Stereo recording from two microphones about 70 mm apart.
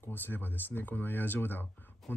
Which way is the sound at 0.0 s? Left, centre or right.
Left.